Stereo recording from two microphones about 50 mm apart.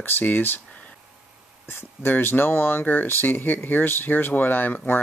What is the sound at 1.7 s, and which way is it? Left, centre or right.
Speech, left.